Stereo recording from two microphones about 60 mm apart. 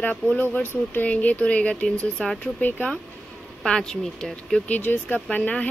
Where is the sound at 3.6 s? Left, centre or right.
Centre.